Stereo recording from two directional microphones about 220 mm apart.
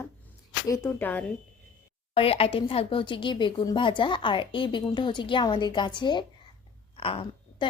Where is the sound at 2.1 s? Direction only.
25° left (ahead or behind).